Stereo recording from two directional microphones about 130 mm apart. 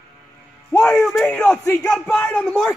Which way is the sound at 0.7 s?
5° left (ahead or behind).